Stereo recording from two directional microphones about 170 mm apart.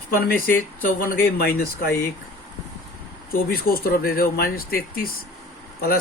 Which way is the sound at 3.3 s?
60° left (ahead or behind).